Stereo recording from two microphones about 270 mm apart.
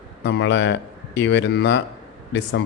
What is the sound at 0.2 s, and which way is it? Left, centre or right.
Speech, left.